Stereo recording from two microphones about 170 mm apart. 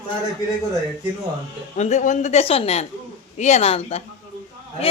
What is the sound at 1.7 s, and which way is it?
A woman's voice, 45° left (ahead or behind).